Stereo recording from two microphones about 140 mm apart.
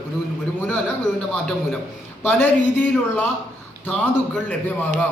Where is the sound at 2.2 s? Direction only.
15° left (ahead or behind).